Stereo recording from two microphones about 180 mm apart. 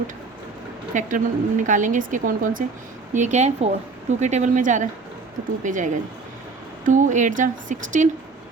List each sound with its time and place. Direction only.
0.9 s a woman's voice: 45° right (ahead or behind)